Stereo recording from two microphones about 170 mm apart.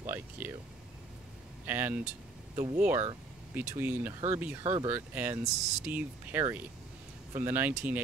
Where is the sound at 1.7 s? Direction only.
10° right (ahead or behind).